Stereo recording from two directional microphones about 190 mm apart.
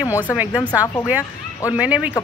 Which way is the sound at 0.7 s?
20° left (ahead or behind).